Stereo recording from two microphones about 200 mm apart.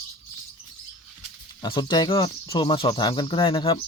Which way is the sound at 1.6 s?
20° left (ahead or behind).